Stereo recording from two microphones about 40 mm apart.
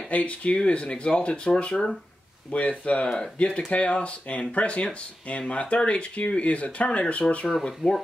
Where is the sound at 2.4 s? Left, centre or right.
Left.